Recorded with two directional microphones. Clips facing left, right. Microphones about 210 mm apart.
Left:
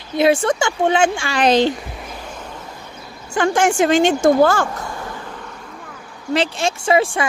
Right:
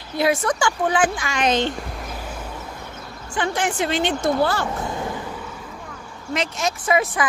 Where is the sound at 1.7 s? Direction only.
Centre (ahead or behind).